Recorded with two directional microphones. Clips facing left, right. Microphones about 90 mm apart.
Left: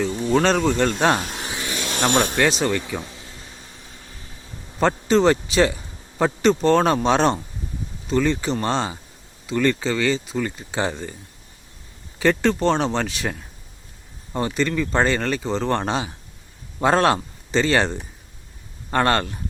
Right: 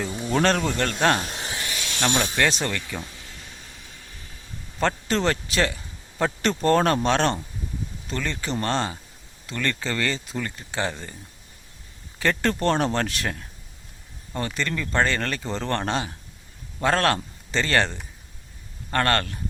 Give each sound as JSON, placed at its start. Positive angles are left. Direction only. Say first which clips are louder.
{"t": 0.2, "sound": "speech", "louder": "left 2 dB", "side_deg": 0}
{"t": 1.7, "sound": "a sound", "louder": "left 5 dB", "side_deg": 45}
{"t": 2.4, "sound": "speech", "louder": "left 4 dB", "side_deg": 10}
{"t": 3.0, "sound": "a sound", "louder": "left 2 dB", "side_deg": 25}
{"t": 4.8, "sound": "a man's voice", "louder": "left 6 dB", "side_deg": 5}
{"t": 10.5, "sound": "speech", "louder": "left 3 dB", "side_deg": 15}
{"t": 12.2, "sound": "speech", "louder": "left 4 dB", "side_deg": 5}
{"t": 14.5, "sound": "speech", "louder": "left 4 dB", "side_deg": 10}